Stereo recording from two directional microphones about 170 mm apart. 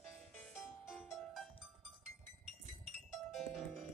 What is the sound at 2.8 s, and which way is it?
Music, centre (ahead or behind).